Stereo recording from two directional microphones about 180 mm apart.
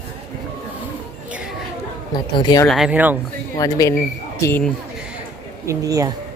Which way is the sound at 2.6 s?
Centre (ahead or behind).